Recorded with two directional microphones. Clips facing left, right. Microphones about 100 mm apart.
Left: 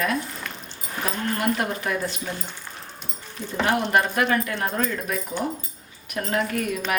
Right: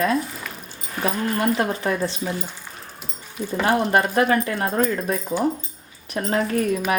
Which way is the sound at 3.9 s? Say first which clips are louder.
Right 3 dB; 35° right (ahead or behind).